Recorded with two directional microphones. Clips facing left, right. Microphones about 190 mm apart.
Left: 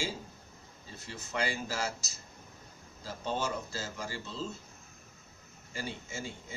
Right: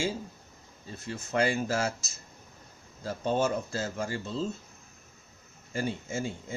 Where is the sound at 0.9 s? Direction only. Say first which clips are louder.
Right 7 dB; 50° right (ahead or behind).